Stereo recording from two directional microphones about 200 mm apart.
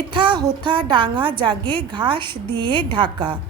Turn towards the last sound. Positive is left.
turn(degrees=-25)  # may be behind; listen again after turning